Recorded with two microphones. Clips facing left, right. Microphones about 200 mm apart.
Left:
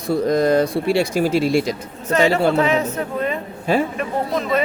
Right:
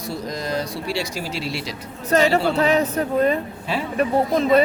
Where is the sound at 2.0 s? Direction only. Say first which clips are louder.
Even; 40° right (ahead or behind).